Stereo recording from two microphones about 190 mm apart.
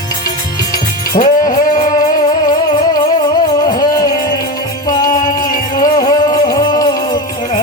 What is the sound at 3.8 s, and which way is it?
Music, 20° left (ahead or behind).